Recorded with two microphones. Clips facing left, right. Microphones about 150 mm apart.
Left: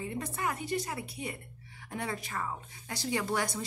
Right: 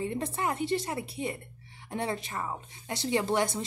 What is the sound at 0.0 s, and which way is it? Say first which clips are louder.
A woman's voice: right 4 dB; 30° right (ahead or behind).